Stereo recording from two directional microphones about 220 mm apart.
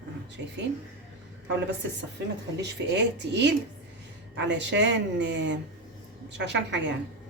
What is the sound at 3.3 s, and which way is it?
A woman's voice, 55° right (ahead or behind).